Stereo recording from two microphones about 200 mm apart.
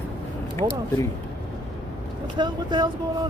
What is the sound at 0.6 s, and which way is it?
Speech, 15° right (ahead or behind).